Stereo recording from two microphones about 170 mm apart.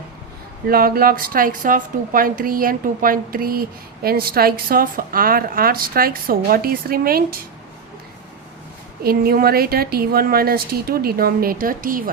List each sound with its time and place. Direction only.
0.7 s a woman's voice: 60° right (ahead or behind)
9.0 s a woman's voice: 65° right (ahead or behind)